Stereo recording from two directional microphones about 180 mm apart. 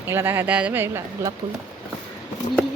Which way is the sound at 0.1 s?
10° right (ahead or behind).